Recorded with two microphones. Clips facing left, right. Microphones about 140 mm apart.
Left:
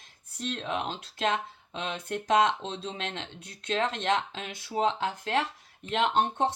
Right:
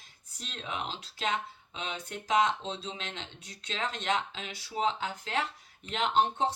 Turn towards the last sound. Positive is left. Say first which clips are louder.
# left 2 dB
turn(degrees=55)  # may be behind; listen again after turning